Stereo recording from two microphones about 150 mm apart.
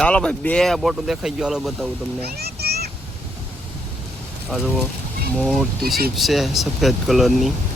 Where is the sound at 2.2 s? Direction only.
90° right.